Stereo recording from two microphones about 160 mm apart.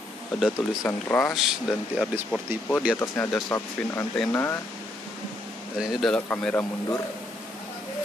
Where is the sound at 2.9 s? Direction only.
15° left (ahead or behind).